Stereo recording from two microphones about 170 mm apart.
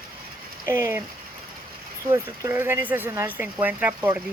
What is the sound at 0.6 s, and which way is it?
Speech, 15° right (ahead or behind).